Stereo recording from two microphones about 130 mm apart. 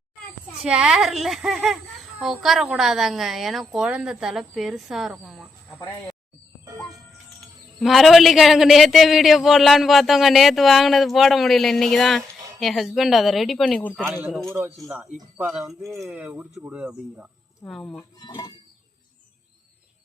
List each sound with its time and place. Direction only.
0.6 s a man's voice: 5° right (ahead or behind)
7.8 s a man's voice: centre (ahead or behind)
14.5 s speech: 20° right (ahead or behind)
15.8 s a man's voice: centre (ahead or behind)
16.1 s speech: 10° right (ahead or behind)
17.7 s a man's voice: 5° left (ahead or behind)